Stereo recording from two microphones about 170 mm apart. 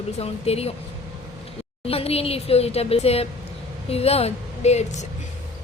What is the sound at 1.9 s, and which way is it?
A woman's voice, 35° left (ahead or behind).